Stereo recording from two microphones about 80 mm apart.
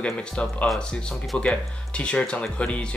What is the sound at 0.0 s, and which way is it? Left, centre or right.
Speech, centre.